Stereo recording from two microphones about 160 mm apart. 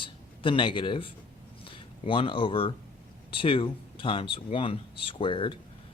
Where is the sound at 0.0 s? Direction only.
30° left (ahead or behind).